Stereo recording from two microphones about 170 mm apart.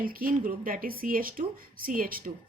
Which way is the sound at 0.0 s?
55° right (ahead or behind).